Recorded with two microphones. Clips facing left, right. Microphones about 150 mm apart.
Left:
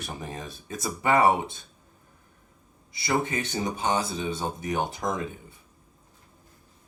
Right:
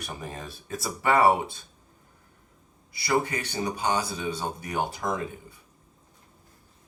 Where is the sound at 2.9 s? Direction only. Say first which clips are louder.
Right 1 dB; 25° left (ahead or behind).